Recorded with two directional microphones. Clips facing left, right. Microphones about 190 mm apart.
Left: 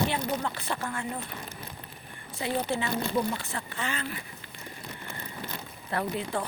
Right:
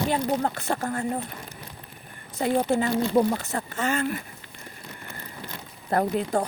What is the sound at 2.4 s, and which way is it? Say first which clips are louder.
Speech: right 7 dB; 45° right (ahead or behind).